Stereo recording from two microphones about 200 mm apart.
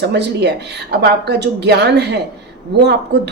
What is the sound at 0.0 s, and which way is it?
A woman's voice, 55° right (ahead or behind).